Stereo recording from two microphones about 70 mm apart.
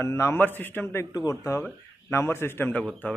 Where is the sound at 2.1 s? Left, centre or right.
Left.